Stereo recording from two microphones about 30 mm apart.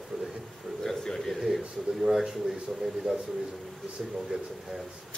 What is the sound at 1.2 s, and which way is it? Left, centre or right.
Speech, centre.